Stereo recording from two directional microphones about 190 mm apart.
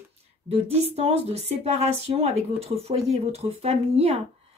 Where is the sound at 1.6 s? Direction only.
35° right (ahead or behind).